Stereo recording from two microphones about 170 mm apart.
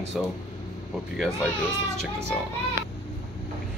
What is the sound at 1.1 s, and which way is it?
Speech, centre (ahead or behind).